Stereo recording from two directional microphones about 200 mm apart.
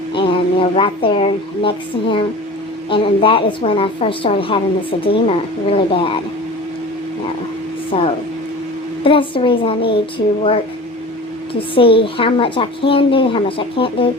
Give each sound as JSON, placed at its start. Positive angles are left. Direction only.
{"t": 0.1, "sound": "a woman's voice", "side_deg": 25}
{"t": 7.9, "sound": "a woman's voice", "side_deg": 25}
{"t": 11.7, "sound": "a woman's voice", "side_deg": 25}